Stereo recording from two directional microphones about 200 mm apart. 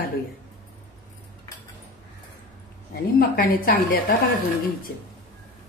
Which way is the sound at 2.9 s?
45° left (ahead or behind).